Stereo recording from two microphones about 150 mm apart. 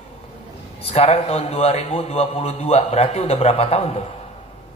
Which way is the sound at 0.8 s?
40° left (ahead or behind).